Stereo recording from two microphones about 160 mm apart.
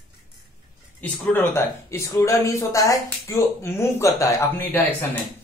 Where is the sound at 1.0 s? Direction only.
10° left (ahead or behind).